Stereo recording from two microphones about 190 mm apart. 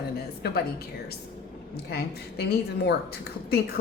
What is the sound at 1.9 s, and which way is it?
A woman's voice, 55° left (ahead or behind).